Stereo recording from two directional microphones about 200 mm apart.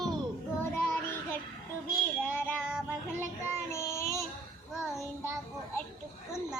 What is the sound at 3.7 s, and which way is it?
Child singing, 15° left (ahead or behind).